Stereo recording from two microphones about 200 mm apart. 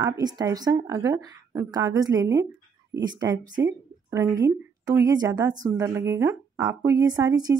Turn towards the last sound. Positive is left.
turn(degrees=-20)  # may be behind; listen again after turning